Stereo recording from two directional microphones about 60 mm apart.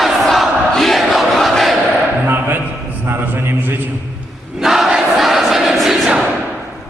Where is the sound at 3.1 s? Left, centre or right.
Right.